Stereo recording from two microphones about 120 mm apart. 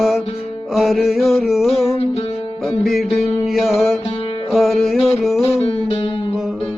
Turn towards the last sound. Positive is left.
turn(degrees=50)  # may be behind; listen again after turning